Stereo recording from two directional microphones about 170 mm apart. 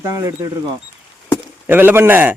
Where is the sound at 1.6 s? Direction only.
10° right (ahead or behind).